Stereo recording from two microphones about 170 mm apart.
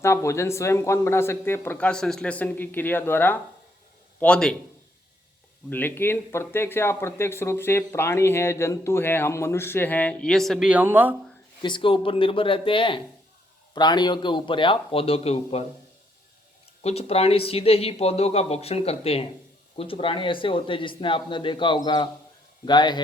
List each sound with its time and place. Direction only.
0.0 s a man's voice: 15° left (ahead or behind)
5.7 s speech: 10° left (ahead or behind); by 11.1 s 10° right (ahead or behind)
11.6 s speech: 30° left (ahead or behind)
16.8 s speech: 35° left (ahead or behind)